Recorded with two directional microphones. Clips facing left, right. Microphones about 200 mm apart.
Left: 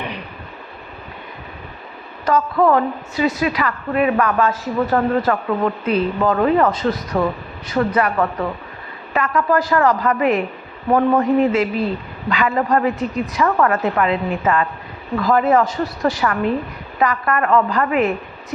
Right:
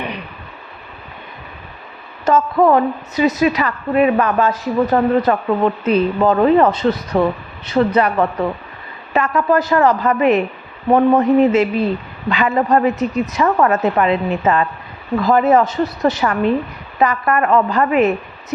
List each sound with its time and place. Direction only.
2.2 s a woman's voice: 25° right (ahead or behind)
9.1 s a woman's voice: 25° right (ahead or behind)